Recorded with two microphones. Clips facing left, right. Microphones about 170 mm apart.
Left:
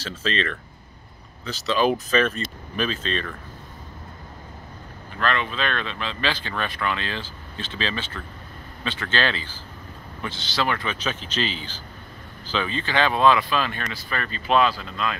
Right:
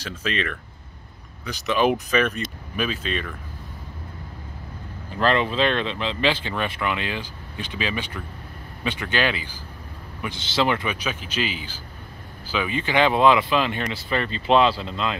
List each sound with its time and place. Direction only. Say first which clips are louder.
0.0 s speech: left 1 dB; 10° right (ahead or behind)
5.2 s speech: right 5 dB; 30° right (ahead or behind)